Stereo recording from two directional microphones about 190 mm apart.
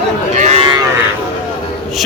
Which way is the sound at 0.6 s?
25° right (ahead or behind).